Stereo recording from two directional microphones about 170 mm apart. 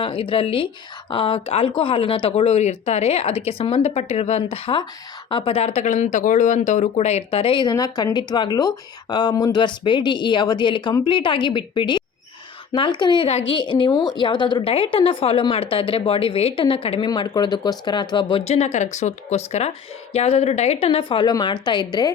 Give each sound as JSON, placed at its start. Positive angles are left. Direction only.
{"t": 0.0, "sound": "a woman's voice", "side_deg": 30}